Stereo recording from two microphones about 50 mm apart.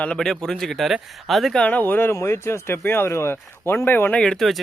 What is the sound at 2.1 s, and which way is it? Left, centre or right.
Speech, left.